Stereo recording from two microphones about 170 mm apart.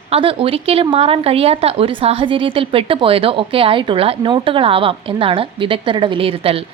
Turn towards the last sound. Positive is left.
turn(degrees=-35)  # may be behind; listen again after turning